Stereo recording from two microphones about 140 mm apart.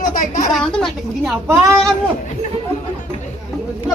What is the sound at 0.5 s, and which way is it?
Speech, 5° left (ahead or behind).